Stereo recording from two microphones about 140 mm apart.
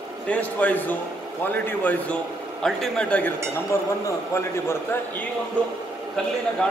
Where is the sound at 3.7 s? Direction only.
20° left (ahead or behind).